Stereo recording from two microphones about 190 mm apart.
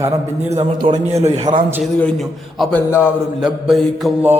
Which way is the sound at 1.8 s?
5° left (ahead or behind).